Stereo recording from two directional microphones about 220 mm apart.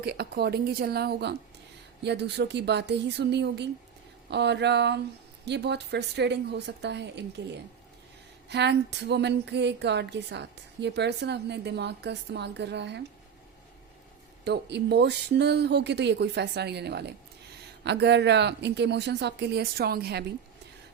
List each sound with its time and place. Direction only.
0.0 s speech: 45° right (ahead or behind)
8.4 s speech: 50° right (ahead or behind)
14.4 s speech: 50° right (ahead or behind)